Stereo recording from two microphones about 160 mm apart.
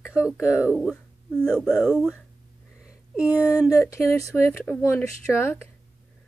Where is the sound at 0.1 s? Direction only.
5° right (ahead or behind).